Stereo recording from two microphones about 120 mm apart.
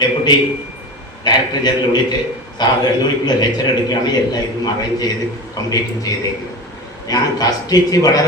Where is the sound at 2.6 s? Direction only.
35° left (ahead or behind).